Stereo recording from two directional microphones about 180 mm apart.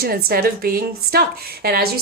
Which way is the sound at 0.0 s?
60° right (ahead or behind).